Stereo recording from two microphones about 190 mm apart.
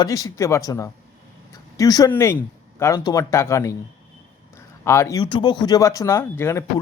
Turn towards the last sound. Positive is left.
turn(degrees=15)  # may be behind; listen again after turning